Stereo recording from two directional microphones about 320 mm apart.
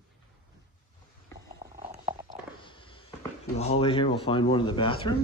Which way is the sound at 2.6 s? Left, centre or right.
Centre.